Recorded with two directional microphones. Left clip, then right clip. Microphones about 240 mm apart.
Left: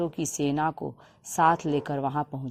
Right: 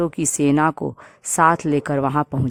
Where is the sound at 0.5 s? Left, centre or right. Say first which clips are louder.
Right 9 dB; right.